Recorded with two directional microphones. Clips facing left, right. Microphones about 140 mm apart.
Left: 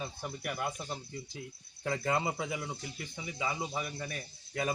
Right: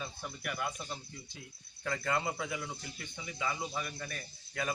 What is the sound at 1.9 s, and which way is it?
Speech, 30° left (ahead or behind).